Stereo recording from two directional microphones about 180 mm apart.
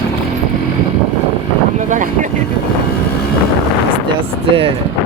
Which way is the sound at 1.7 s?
45° right (ahead or behind).